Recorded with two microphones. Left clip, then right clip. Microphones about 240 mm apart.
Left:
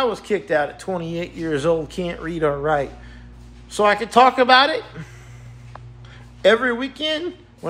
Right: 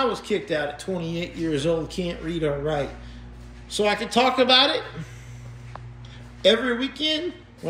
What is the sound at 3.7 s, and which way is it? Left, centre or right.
Speech, centre.